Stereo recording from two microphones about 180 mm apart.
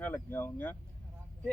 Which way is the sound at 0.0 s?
10° left (ahead or behind).